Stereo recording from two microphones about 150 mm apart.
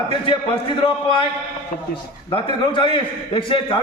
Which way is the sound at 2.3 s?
35° left (ahead or behind).